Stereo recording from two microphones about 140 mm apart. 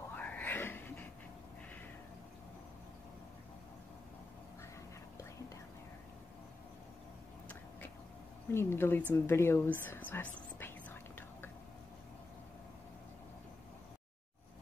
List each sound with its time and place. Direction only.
0.1 s a sound: 10° left (ahead or behind)
8.5 s speech: 15° left (ahead or behind)
9.1 s whispering: 20° left (ahead or behind)